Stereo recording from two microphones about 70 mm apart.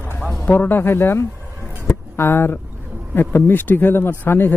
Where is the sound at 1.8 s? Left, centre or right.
Left.